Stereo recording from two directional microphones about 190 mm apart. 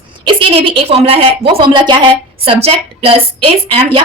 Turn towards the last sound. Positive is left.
turn(degrees=-30)  # may be behind; listen again after turning